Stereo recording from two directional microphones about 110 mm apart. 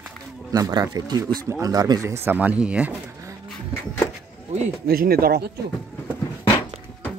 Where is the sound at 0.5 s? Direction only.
35° right (ahead or behind); by 3.3 s 20° right (ahead or behind).